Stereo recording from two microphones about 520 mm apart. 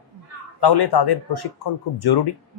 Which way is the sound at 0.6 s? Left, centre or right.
Left.